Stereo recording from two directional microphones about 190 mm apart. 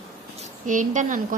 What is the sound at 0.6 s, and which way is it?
Speech, 40° right (ahead or behind).